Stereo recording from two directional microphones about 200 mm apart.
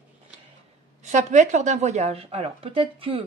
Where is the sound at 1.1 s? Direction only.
35° right (ahead or behind).